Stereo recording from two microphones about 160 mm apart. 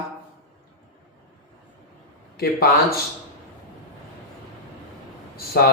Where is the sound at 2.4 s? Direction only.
75° left (ahead or behind).